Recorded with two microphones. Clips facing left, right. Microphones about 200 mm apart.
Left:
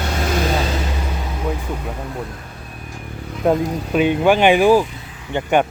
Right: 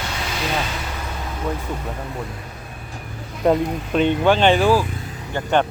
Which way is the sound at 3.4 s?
5° left (ahead or behind).